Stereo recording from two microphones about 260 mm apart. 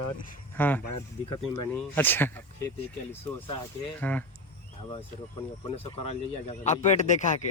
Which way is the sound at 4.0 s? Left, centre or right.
Centre.